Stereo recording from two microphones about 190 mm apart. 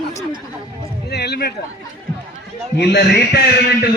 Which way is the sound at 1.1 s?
60° left (ahead or behind).